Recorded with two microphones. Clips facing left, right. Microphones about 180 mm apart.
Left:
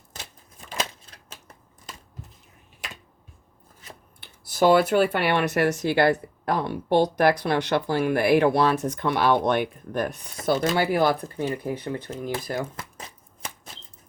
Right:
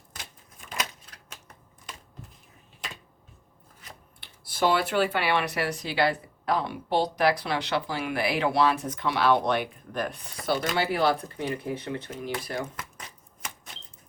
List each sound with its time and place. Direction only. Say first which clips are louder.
0.1 s a sound: left 3 dB; 30° left (ahead or behind)
4.4 s speech: left 7 dB; 45° left (ahead or behind)
10.5 s speech: left 5 dB; 25° left (ahead or behind)
10.8 s speech: left 3 dB; 45° left (ahead or behind)
11.9 s shuffling cards: left 3 dB; 30° left (ahead or behind)